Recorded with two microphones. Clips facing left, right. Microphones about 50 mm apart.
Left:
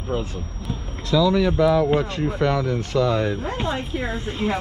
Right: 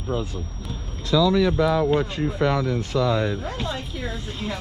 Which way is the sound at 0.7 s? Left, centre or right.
Left.